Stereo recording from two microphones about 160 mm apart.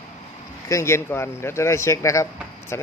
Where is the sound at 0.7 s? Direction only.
15° left (ahead or behind).